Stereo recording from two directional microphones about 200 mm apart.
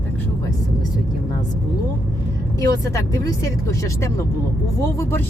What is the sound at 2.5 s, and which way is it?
Speech, 15° left (ahead or behind).